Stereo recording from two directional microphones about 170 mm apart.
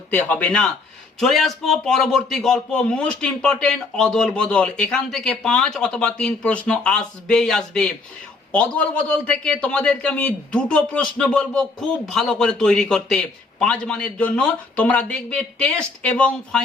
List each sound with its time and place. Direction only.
0.1 s a man's voice: 10° left (ahead or behind)